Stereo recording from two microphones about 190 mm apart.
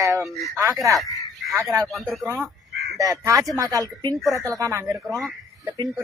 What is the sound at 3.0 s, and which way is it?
A woman's voice, 15° right (ahead or behind).